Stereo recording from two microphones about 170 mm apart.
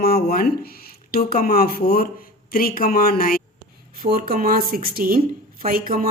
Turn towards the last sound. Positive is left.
turn(degrees=-60)  # may be behind; listen again after turning